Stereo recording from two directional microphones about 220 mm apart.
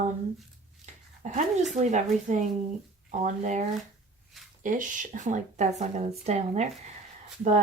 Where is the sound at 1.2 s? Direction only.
35° right (ahead or behind).